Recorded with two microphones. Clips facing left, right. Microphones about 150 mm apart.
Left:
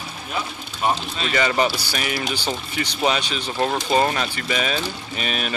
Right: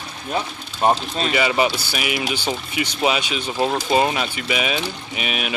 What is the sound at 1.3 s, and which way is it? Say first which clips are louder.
Speech: even; 10° right (ahead or behind).